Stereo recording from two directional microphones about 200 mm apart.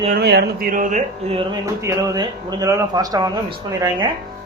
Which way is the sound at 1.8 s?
20° right (ahead or behind).